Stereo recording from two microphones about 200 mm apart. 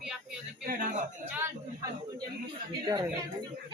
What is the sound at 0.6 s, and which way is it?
Speech, 40° right (ahead or behind).